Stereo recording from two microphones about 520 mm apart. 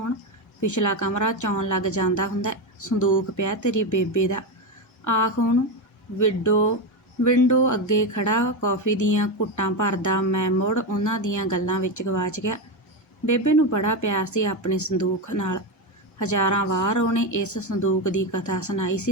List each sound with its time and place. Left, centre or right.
0.6 s speech: left